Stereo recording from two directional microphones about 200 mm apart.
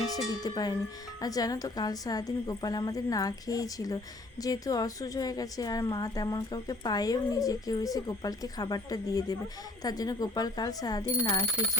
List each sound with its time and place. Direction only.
0.1 s a woman's voice: 20° left (ahead or behind)